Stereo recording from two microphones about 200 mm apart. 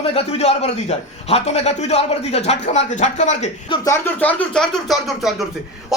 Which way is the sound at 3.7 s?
15° left (ahead or behind).